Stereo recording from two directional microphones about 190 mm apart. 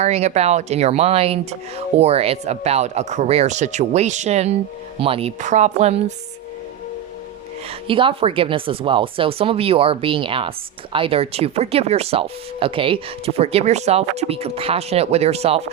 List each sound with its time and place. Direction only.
0.0 s speech: 35° right (ahead or behind)
7.7 s speech: 25° right (ahead or behind)